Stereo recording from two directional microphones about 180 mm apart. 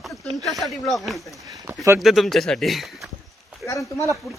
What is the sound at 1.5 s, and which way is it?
Speech, 15° right (ahead or behind).